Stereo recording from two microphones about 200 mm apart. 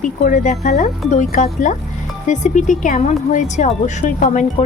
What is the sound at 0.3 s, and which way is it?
Speech, 40° left (ahead or behind).